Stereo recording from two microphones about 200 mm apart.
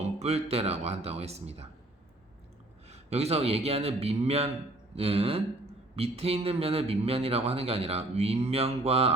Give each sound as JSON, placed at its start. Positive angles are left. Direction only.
{"t": 0.0, "sound": "a man's voice", "side_deg": -30}
{"t": 2.9, "sound": "a man's voice", "side_deg": -30}